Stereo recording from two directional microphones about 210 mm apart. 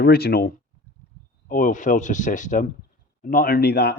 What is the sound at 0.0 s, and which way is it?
A man's voice, 50° left (ahead or behind).